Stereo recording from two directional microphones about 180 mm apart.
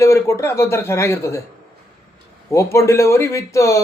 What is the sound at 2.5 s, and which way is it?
A man's voice, 15° left (ahead or behind).